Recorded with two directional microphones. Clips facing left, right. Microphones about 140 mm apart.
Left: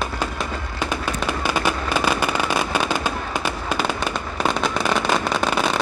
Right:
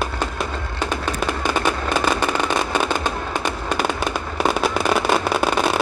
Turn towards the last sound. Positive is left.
turn(degrees=-5)  # may be behind; listen again after turning